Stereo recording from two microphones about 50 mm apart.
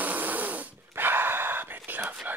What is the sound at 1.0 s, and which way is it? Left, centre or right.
Dog, right.